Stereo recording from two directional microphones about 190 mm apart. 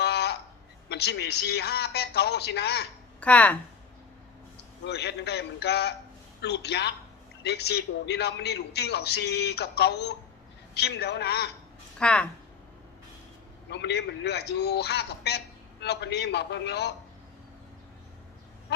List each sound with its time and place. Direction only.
0.0 s a sound: 60° left (ahead or behind)
0.9 s a man's voice: 60° left (ahead or behind)
3.2 s speech: 5° left (ahead or behind)
4.8 s a man's voice: 60° left (ahead or behind)
11.9 s speech: 5° left (ahead or behind)
13.7 s a man's voice: 65° left (ahead or behind)